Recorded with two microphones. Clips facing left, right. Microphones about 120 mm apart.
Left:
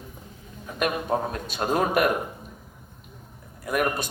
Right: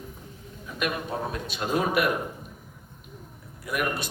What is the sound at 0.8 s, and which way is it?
A man's voice, 45° left (ahead or behind).